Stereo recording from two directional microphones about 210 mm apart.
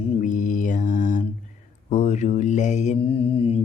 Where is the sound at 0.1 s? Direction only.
35° left (ahead or behind).